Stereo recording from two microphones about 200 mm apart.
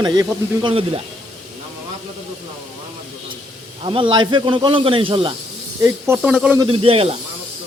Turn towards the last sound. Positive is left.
turn(degrees=-30)  # may be behind; listen again after turning